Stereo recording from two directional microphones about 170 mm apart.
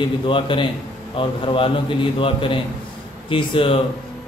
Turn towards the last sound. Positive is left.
turn(degrees=30)  # may be behind; listen again after turning